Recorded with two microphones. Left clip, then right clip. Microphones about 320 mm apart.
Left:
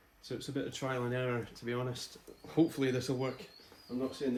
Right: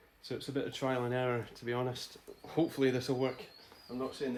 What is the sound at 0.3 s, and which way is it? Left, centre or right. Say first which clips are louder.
Speech: right 1 dB; right.